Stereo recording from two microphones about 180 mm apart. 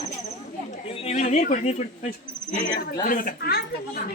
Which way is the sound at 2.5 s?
50° left (ahead or behind).